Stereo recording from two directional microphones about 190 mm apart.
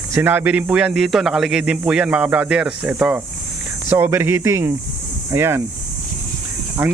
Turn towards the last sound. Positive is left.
turn(degrees=-10)  # may be behind; listen again after turning